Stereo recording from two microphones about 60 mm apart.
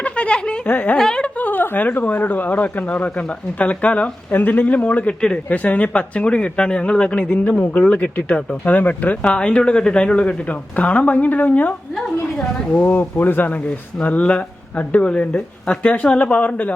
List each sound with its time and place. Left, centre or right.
0.0 s a sound: centre
0.6 s a woman's voice: left
0.9 s a woman's voice: centre
1.4 s speech: left
7.6 s speech: left